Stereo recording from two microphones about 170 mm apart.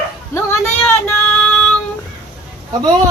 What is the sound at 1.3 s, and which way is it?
Female singing, 5° left (ahead or behind).